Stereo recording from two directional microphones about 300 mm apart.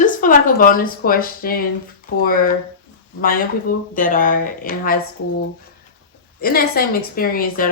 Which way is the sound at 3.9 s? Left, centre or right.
Left.